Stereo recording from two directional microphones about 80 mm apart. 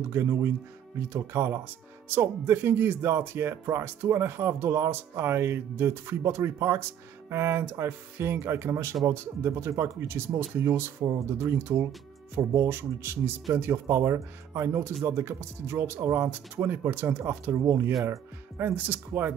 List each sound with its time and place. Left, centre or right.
0.1 s speech: right